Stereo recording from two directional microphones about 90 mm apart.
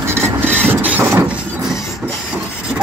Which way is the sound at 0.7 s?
20° right (ahead or behind).